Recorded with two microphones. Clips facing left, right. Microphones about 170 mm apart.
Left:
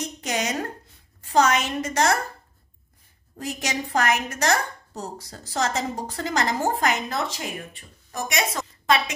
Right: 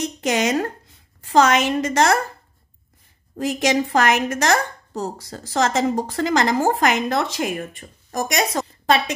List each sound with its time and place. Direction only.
0.2 s a woman's voice: 90° right
3.3 s a woman's voice: 90° right
8.1 s a woman's voice: 40° right (ahead or behind)